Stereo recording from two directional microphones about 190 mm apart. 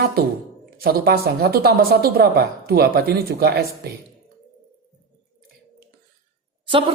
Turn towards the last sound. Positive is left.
turn(degrees=-25)  # may be behind; listen again after turning